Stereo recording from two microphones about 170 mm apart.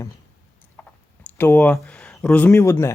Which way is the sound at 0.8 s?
10° left (ahead or behind).